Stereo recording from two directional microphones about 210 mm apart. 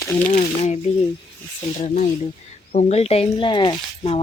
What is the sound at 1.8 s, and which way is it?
Speech, 35° left (ahead or behind).